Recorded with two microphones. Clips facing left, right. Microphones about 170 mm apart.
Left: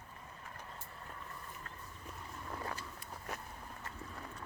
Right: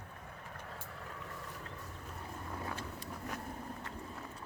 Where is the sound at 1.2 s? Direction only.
90° right.